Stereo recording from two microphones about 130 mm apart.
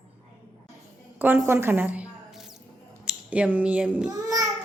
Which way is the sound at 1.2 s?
15° right (ahead or behind).